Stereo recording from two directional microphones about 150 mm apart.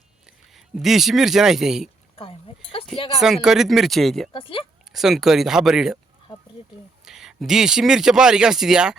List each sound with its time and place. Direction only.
0.5 s speech: centre (ahead or behind)
3.2 s speech: 5° right (ahead or behind)
4.3 s speech: 35° left (ahead or behind)
4.9 s speech: centre (ahead or behind)
7.0 s speech: 5° right (ahead or behind)